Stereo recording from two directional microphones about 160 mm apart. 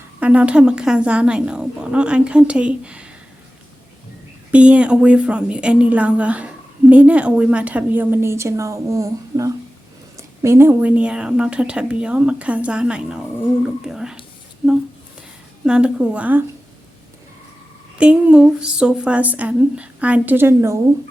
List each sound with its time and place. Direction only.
0.2 s a woman's voice: 10° right (ahead or behind)
4.5 s a woman's voice: 5° right (ahead or behind)
15.6 s a woman's voice: 5° right (ahead or behind)
17.9 s a woman's voice: 5° right (ahead or behind)